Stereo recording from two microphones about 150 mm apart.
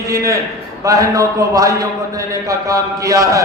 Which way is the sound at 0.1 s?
20° right (ahead or behind).